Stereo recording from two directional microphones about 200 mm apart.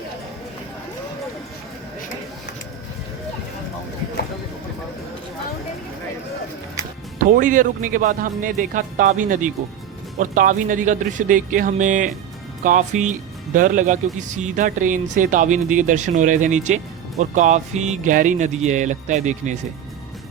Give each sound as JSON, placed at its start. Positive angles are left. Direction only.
{"t": 7.2, "sound": "speech", "side_deg": -40}